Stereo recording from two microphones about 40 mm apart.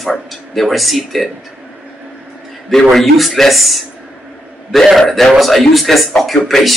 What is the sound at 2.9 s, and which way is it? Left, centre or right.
Speech, centre.